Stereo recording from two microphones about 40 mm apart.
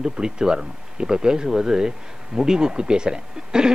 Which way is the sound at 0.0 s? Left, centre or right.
Centre.